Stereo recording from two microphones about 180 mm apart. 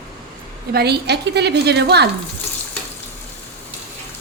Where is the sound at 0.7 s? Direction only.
65° right (ahead or behind).